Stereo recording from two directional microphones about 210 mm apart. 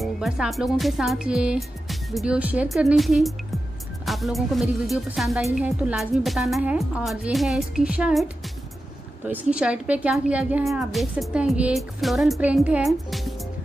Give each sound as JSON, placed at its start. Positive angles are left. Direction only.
{"t": 0.0, "sound": "speech", "side_deg": 0}
{"t": 9.3, "sound": "speech", "side_deg": -5}